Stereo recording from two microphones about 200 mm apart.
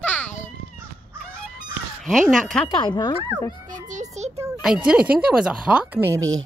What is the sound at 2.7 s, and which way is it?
Speech, 20° left (ahead or behind).